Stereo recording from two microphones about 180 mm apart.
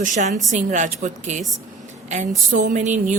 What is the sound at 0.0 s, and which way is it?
Speech, 40° right (ahead or behind).